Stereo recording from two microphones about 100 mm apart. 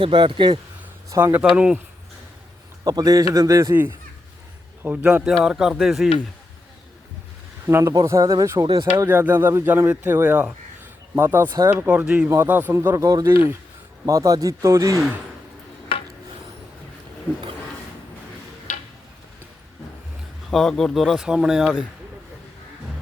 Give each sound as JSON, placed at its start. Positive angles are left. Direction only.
{"t": 0.0, "sound": "speech", "side_deg": -55}
{"t": 1.1, "sound": "speech", "side_deg": -20}
{"t": 2.8, "sound": "speech", "side_deg": -40}
{"t": 4.8, "sound": "speech", "side_deg": -15}
{"t": 7.7, "sound": "speech", "side_deg": -30}
{"t": 8.6, "sound": "speech", "side_deg": -50}
{"t": 9.0, "sound": "speech", "side_deg": -20}
{"t": 15.9, "sound": "rub", "side_deg": 70}
{"t": 20.5, "sound": "speech", "side_deg": 5}